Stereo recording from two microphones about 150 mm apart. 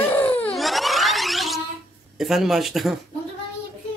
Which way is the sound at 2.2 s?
Centre (ahead or behind).